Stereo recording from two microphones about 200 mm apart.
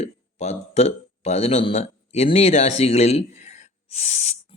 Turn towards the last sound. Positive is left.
turn(degrees=35)  # may be behind; listen again after turning